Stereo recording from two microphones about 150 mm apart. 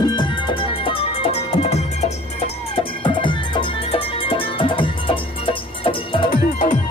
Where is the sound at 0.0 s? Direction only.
30° left (ahead or behind).